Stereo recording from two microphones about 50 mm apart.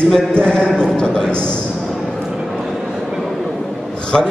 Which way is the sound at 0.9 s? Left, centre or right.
Centre.